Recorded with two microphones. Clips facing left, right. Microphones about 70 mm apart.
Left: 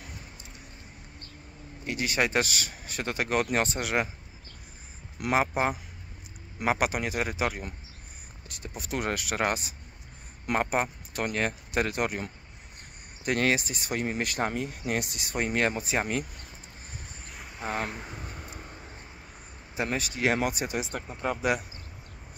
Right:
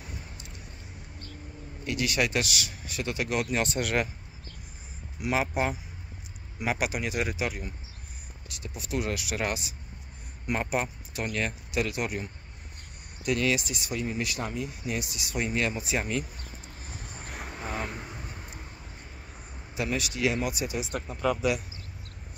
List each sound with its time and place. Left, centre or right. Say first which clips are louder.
1.9 s speech: even; left
3.7 s speech: right 1 dB; left
5.3 s speech: left 2 dB; left
10.4 s speech: left 3 dB; left
10.7 s speech: left 1 dB; left
17.3 s vehicle: right 6 dB; right
19.7 s speech: even; left
20.8 s speech: right 3 dB; left